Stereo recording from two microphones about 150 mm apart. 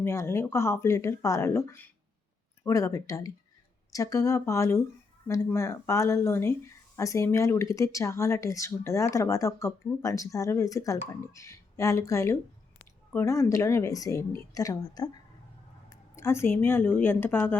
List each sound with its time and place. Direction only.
0.0 s speech: 20° left (ahead or behind)